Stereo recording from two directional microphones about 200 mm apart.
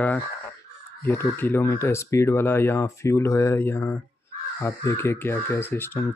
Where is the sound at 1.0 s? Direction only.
10° left (ahead or behind).